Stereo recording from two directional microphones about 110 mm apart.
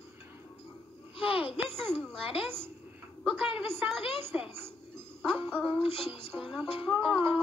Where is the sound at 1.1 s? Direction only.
55° left (ahead or behind).